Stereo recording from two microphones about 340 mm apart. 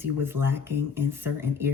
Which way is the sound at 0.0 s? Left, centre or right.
Centre.